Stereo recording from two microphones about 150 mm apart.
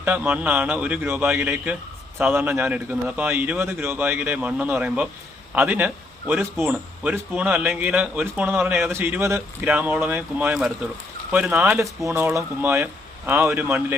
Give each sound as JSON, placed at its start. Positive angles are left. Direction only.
{"t": 0.0, "sound": "a man's voice", "side_deg": -10}
{"t": 11.6, "sound": "speech", "side_deg": -15}